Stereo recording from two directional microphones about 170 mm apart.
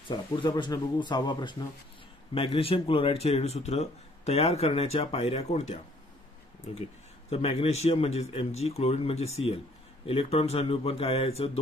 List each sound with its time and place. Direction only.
0.1 s speech: 25° left (ahead or behind)
7.2 s speech: 35° left (ahead or behind)